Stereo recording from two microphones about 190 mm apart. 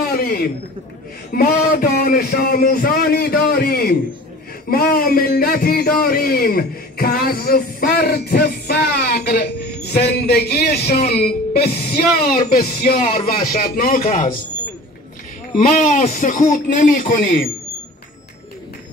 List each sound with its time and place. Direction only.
0.1 s a sound: 55° left (ahead or behind)
1.3 s a man's voice: 50° left (ahead or behind)
15.6 s a man's voice: 40° left (ahead or behind)